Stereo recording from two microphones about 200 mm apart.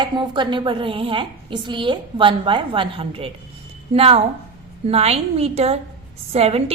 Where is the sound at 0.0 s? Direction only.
25° right (ahead or behind).